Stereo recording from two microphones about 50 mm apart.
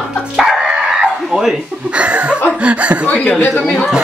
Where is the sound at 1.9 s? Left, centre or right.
Right.